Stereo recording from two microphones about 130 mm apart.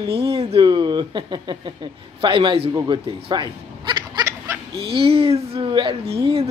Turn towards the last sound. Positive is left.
turn(degrees=-45)  # may be behind; listen again after turning